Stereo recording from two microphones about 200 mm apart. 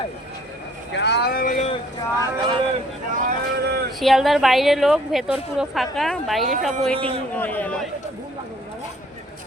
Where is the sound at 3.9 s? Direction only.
Centre (ahead or behind).